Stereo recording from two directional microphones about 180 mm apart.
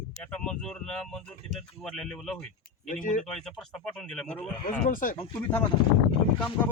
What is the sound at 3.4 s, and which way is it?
Speech, centre (ahead or behind).